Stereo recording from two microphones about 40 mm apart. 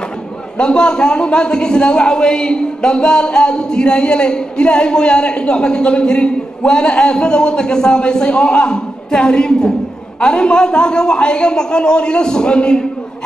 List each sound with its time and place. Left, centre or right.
0.6 s a man's voice: left